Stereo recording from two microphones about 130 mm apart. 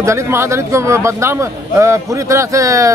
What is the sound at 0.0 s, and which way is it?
A man's voice, 20° right (ahead or behind).